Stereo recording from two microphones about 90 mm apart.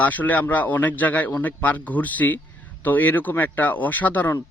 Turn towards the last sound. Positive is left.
turn(degrees=20)  # may be behind; listen again after turning